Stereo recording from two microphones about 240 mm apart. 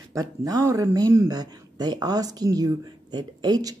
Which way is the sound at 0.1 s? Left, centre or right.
Centre.